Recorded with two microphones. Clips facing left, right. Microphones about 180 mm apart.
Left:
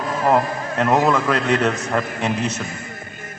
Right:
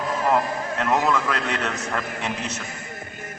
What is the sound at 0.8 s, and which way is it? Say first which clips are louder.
Speech: left 5 dB; 25° left (ahead or behind).